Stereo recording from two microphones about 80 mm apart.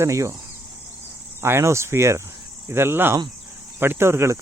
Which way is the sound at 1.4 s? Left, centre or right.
Right.